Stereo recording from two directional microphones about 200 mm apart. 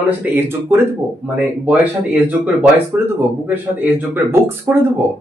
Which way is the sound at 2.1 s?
10° right (ahead or behind).